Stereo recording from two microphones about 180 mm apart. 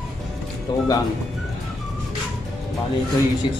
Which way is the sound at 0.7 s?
25° left (ahead or behind).